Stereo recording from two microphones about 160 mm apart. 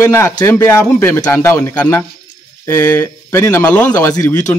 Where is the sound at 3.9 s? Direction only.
20° left (ahead or behind).